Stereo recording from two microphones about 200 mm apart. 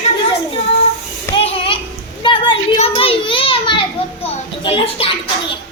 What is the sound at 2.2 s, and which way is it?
Children playing, 25° left (ahead or behind).